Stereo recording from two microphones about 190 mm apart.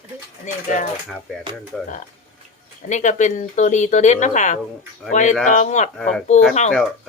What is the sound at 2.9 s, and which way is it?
Speech, 40° left (ahead or behind).